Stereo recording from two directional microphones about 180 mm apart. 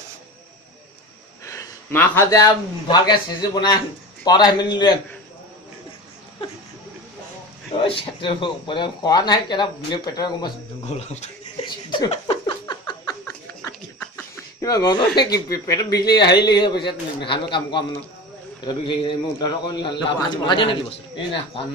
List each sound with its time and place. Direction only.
1.4 s a sound: 15° left (ahead or behind)
2.9 s speech: 25° left (ahead or behind)
7.7 s speech: 30° left (ahead or behind)
10.9 s a sound: 35° left (ahead or behind)
13.2 s snicker: 5° left (ahead or behind)
14.6 s speech: 20° left (ahead or behind)